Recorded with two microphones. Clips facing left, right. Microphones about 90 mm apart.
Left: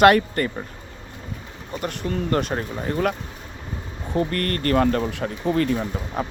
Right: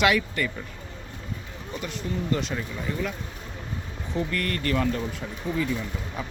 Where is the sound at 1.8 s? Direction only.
60° left (ahead or behind).